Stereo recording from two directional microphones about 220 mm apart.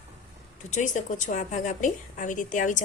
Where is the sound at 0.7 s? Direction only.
35° left (ahead or behind).